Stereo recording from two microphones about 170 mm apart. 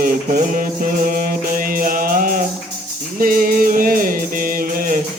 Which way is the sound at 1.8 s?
55° right (ahead or behind).